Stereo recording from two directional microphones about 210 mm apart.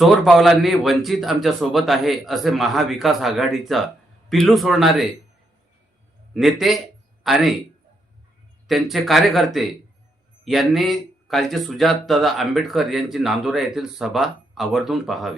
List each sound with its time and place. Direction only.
0.0 s speech: centre (ahead or behind)
6.3 s speech: centre (ahead or behind)
8.6 s speech: centre (ahead or behind)